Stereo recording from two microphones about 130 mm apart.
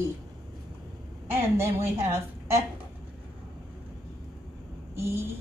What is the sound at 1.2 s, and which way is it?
A woman's voice, 20° right (ahead or behind).